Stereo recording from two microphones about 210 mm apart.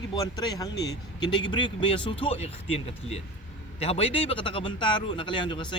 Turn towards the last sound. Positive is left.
turn(degrees=20)  # may be behind; listen again after turning